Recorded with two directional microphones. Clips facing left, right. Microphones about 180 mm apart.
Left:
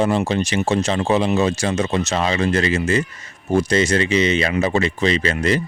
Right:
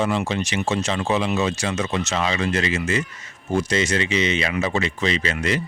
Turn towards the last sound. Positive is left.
turn(degrees=35)  # may be behind; listen again after turning